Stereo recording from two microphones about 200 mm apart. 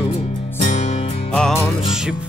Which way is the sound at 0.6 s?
35° left (ahead or behind).